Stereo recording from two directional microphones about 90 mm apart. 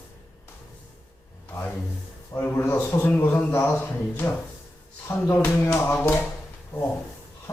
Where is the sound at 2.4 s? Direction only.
25° left (ahead or behind).